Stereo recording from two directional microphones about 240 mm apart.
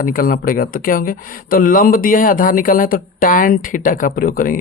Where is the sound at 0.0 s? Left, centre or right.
Left.